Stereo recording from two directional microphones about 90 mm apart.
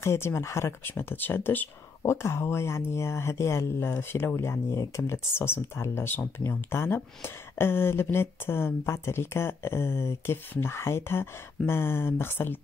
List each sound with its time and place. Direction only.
0.0 s speech: 30° left (ahead or behind)